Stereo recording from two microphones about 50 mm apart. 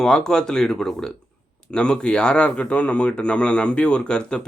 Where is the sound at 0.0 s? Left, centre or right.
Centre.